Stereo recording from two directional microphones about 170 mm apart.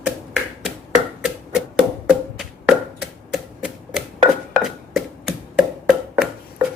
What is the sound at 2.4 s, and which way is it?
Typewriter, 5° right (ahead or behind).